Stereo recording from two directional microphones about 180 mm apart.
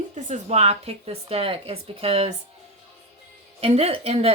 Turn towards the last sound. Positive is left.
turn(degrees=-35)  # may be behind; listen again after turning